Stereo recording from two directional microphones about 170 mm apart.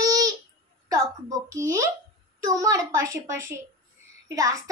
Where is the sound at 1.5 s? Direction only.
15° right (ahead or behind).